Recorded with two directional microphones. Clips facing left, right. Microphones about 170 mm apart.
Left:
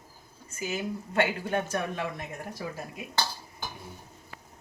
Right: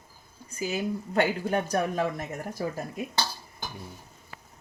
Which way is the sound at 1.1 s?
35° right (ahead or behind).